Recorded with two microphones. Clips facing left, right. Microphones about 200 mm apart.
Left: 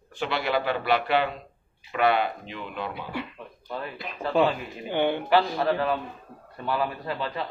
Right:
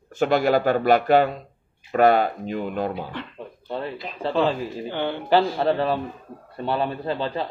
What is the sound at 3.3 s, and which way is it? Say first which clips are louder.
A man's voice: right 5 dB; 30° right (ahead or behind).